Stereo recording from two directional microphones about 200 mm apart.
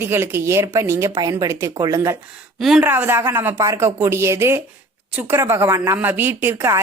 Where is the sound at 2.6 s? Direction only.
Centre (ahead or behind).